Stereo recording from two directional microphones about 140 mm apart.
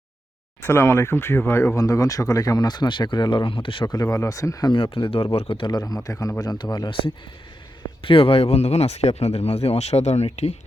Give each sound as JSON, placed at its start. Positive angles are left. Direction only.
{"t": 0.6, "sound": "speech", "side_deg": 15}
{"t": 4.0, "sound": "speech", "side_deg": 20}
{"t": 8.0, "sound": "speech", "side_deg": 40}